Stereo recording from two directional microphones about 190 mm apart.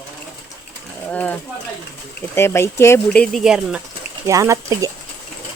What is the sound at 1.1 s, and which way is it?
Speech, 10° left (ahead or behind).